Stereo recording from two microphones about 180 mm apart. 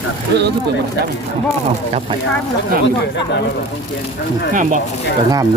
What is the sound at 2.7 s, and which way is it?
Speech, 50° right (ahead or behind).